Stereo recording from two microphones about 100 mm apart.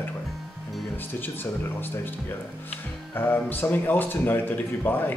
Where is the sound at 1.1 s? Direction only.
20° left (ahead or behind).